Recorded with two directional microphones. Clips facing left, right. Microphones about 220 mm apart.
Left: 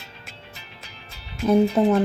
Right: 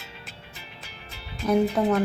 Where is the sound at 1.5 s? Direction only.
25° left (ahead or behind).